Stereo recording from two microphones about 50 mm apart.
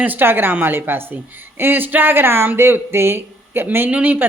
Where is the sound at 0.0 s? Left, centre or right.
Right.